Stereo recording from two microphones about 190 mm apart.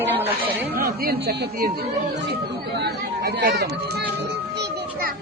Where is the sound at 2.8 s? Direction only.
55° right (ahead or behind).